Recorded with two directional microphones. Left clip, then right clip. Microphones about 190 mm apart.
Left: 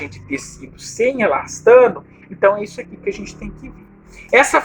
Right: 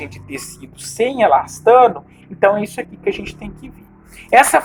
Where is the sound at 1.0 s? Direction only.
20° right (ahead or behind).